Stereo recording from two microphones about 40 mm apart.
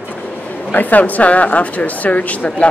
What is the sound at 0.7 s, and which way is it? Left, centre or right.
Speech, left.